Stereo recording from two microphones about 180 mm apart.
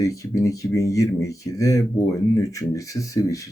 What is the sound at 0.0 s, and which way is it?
Speech, 20° left (ahead or behind).